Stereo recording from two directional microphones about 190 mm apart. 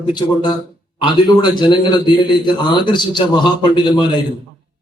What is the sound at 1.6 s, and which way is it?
A man's voice, 25° left (ahead or behind).